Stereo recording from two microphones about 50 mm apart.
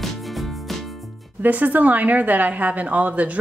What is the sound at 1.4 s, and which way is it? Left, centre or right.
A woman's voice, right.